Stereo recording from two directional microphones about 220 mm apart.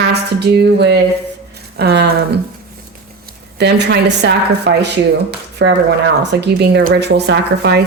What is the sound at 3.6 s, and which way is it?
Speech, 50° right (ahead or behind).